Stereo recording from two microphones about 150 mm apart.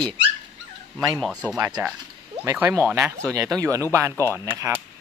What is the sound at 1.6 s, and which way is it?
Speech, 25° right (ahead or behind).